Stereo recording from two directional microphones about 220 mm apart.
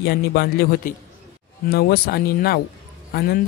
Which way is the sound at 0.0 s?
45° left (ahead or behind).